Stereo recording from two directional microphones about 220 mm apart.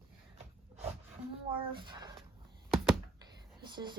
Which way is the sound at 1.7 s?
20° right (ahead or behind).